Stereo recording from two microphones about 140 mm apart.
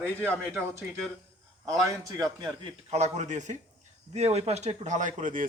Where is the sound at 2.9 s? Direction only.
55° right (ahead or behind).